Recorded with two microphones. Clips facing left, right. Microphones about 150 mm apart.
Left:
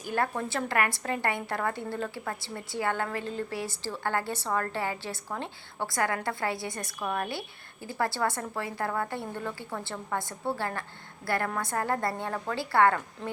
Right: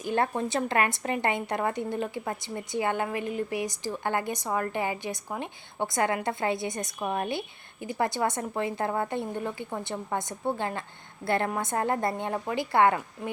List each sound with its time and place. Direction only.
0.0 s speech: 20° right (ahead or behind)